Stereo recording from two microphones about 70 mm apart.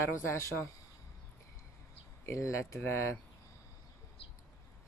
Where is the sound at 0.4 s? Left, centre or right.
Left.